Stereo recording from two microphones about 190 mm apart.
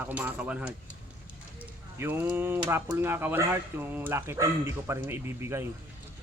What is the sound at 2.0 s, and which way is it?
Speech, 10° right (ahead or behind).